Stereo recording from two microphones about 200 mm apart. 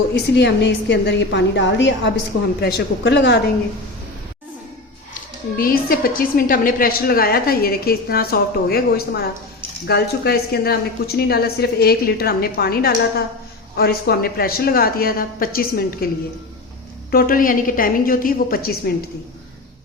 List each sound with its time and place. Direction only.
0.1 s a woman's voice: 60° left (ahead or behind)
2.6 s a woman's voice: 50° left (ahead or behind)
5.5 s a woman's voice: 45° left (ahead or behind)
17.1 s a woman's voice: 45° left (ahead or behind)